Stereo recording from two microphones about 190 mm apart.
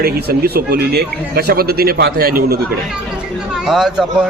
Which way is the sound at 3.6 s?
Centre (ahead or behind).